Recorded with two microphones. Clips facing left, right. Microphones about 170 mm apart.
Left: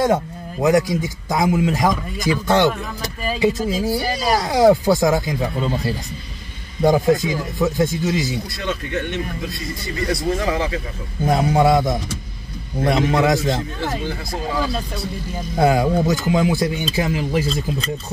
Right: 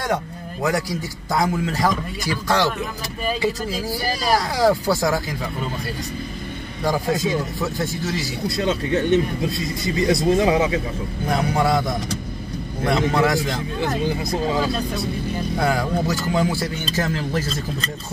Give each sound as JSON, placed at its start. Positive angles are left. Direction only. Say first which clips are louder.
{"t": 0.0, "sound": "a man's voice", "louder": "left 6 dB", "side_deg": 20}
{"t": 6.8, "sound": "a man's voice", "louder": "left 6 dB", "side_deg": 20}
{"t": 8.5, "sound": "speech", "louder": "right 5 dB", "side_deg": -25}
{"t": 11.2, "sound": "a man's voice", "louder": "left 5 dB", "side_deg": 20}
{"t": 14.0, "sound": "speech", "louder": "right 4 dB", "side_deg": -20}
{"t": 15.6, "sound": "speech", "louder": "left 6 dB", "side_deg": 20}